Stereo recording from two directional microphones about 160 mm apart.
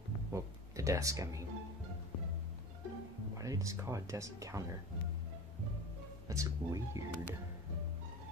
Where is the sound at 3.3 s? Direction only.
20° right (ahead or behind).